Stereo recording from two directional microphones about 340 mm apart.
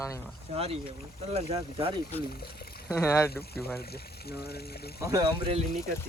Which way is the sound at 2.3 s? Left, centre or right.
Left.